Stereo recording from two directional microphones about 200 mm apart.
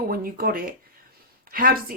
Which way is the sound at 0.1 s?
45° right (ahead or behind).